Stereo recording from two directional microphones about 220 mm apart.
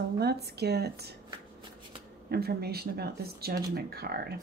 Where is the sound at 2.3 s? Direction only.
45° right (ahead or behind).